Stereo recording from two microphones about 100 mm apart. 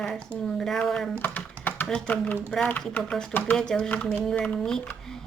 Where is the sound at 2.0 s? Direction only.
15° left (ahead or behind).